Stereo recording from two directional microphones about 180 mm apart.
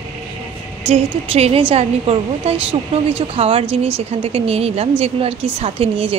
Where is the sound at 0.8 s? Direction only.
35° right (ahead or behind).